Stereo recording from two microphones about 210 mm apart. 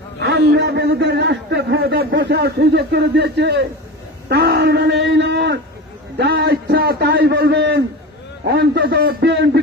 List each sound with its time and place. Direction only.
0.2 s a man's voice: 55° right (ahead or behind)
4.3 s a sound: 50° right (ahead or behind)
6.1 s a man's voice: 50° right (ahead or behind)